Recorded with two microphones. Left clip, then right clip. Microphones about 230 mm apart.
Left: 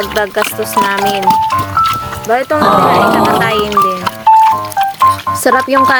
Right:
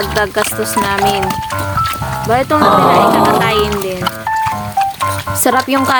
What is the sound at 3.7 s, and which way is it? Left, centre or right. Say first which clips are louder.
Music: left 6 dB; left.